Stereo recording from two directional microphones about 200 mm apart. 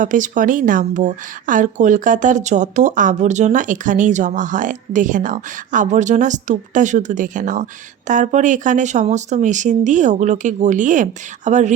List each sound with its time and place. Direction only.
0.0 s a woman's voice: 40° right (ahead or behind)